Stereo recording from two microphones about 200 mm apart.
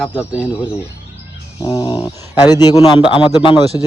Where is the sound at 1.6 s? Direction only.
20° left (ahead or behind).